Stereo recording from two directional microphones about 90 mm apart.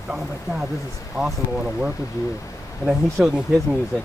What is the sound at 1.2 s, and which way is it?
Speech, 5° left (ahead or behind).